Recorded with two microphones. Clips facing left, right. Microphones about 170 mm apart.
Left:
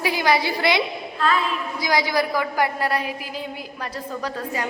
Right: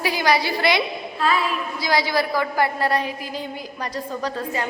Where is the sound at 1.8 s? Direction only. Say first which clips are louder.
Even; 15° left (ahead or behind).